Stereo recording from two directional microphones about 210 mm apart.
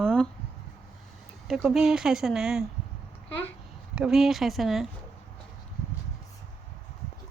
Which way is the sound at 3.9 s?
5° right (ahead or behind).